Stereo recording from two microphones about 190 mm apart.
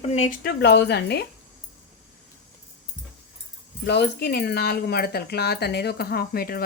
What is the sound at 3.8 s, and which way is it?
Speech, 60° left (ahead or behind).